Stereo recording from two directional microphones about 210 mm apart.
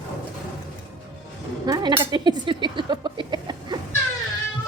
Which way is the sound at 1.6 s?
20° right (ahead or behind).